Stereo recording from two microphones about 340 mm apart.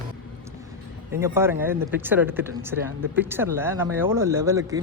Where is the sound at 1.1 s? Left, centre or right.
Centre.